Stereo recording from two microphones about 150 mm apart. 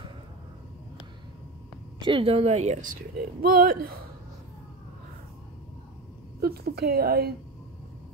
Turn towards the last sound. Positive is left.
turn(degrees=-90)